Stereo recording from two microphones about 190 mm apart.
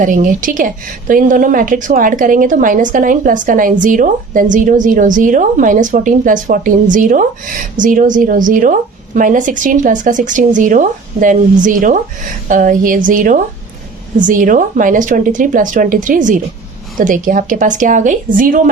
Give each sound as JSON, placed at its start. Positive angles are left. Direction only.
{"t": 0.0, "sound": "a woman's voice", "side_deg": -45}